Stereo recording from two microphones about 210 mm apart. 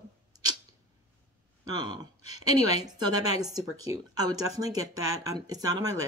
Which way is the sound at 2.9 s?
20° right (ahead or behind).